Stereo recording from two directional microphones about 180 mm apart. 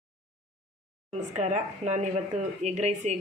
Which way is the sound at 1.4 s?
40° right (ahead or behind).